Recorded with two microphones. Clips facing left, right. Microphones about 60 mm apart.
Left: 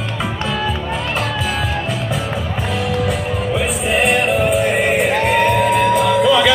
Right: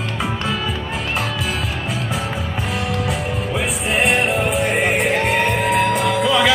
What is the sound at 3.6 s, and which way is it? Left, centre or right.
Music, centre.